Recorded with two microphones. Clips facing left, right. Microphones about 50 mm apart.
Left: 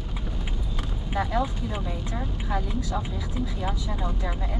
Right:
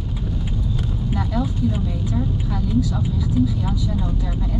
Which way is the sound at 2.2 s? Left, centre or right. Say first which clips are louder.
Right 4 dB; left.